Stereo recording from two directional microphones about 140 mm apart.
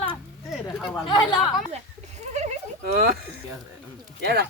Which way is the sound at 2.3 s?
55° right (ahead or behind).